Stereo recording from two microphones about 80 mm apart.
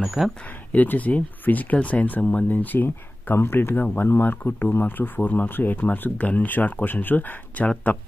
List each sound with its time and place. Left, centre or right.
0.0 s speech: centre
0.7 s speech: centre